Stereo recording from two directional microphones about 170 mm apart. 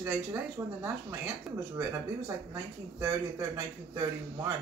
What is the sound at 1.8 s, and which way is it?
Speech, 15° right (ahead or behind).